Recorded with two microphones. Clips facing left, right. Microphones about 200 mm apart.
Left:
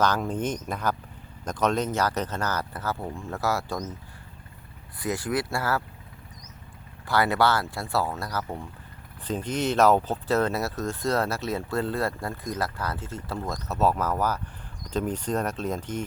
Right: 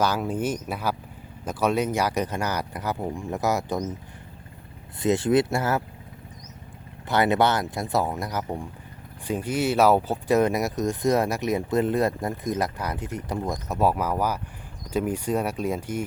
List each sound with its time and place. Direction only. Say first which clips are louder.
0.0 s speech: right 1 dB; 10° right (ahead or behind)
4.9 s speech: right 7 dB; 25° right (ahead or behind)
7.1 s speech: right 2 dB; 20° right (ahead or behind)